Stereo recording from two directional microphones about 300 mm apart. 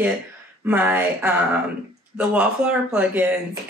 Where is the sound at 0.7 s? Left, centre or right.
Centre.